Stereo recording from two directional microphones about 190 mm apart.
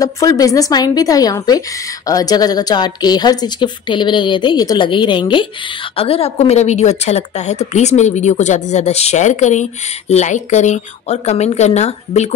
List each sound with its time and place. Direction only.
0.0 s a woman's voice: 20° left (ahead or behind); by 12.4 s 35° left (ahead or behind)